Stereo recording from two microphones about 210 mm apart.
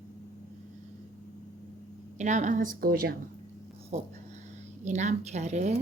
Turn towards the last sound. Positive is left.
turn(degrees=-35)  # may be behind; listen again after turning